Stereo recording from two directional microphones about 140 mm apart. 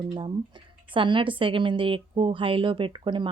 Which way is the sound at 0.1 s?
35° right (ahead or behind).